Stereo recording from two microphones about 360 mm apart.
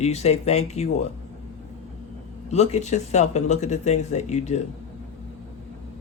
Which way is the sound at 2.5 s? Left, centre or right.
Centre.